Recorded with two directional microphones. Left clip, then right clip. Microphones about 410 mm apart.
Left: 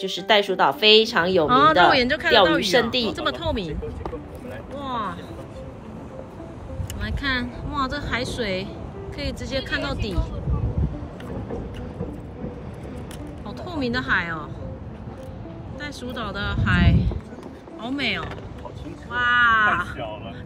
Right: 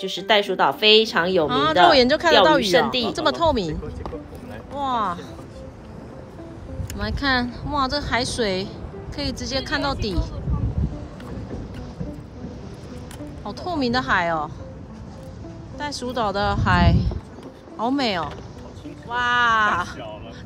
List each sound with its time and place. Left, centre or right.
0.0 s a woman's voice: centre
4.7 s a sound: centre
7.0 s a woman's voice: centre
10.8 s boat: centre
13.5 s a woman's voice: centre
15.8 s a woman's voice: centre